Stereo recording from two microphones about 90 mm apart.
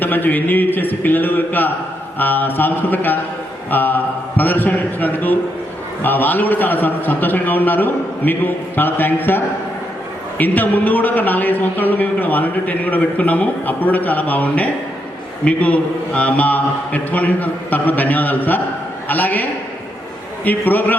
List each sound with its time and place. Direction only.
0.0 s a man's voice: 20° left (ahead or behind)